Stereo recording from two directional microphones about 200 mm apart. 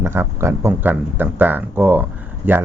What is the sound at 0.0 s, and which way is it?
Speech, 10° right (ahead or behind).